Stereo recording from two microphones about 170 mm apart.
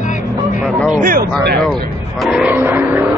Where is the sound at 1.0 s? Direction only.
55° right (ahead or behind).